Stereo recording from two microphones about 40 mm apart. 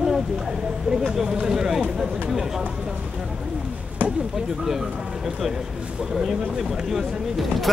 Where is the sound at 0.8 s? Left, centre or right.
Centre.